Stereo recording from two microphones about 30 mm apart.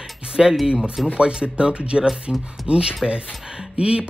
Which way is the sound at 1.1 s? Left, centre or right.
Right.